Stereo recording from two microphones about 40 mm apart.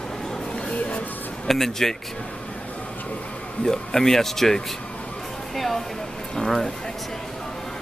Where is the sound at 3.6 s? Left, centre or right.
Centre.